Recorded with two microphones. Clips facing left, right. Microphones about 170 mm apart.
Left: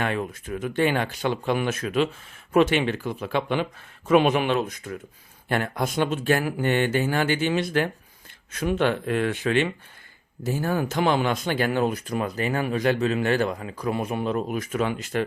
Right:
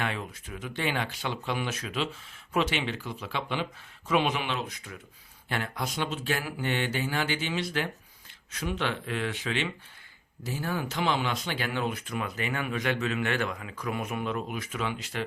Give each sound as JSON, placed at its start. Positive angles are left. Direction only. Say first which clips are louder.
{"t": 0.0, "sound": "speech", "louder": "left 6 dB", "side_deg": 50}